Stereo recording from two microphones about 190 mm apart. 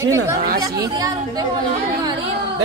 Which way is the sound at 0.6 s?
20° right (ahead or behind).